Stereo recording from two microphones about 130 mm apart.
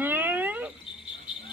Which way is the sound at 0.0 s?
15° right (ahead or behind).